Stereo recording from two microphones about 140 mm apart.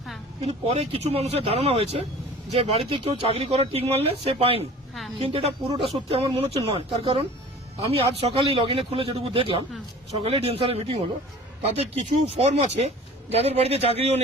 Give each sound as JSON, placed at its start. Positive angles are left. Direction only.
{"t": 0.4, "sound": "a man's voice", "side_deg": -45}